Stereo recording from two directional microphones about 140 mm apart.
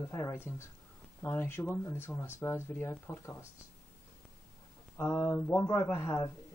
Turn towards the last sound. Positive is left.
turn(degrees=20)  # may be behind; listen again after turning